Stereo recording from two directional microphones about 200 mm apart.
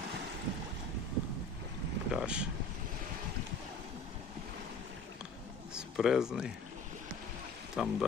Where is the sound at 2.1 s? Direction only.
5° right (ahead or behind).